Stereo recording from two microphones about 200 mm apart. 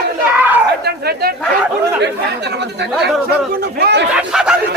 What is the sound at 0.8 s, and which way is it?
Speech, 50° right (ahead or behind).